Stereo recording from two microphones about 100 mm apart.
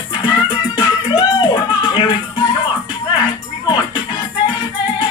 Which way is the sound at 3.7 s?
50° left (ahead or behind).